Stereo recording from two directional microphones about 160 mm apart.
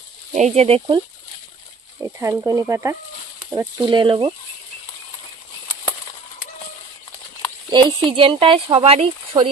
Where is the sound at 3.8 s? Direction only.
30° right (ahead or behind).